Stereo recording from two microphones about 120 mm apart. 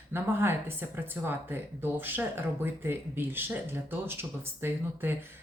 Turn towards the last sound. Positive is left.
turn(degrees=-20)  # may be behind; listen again after turning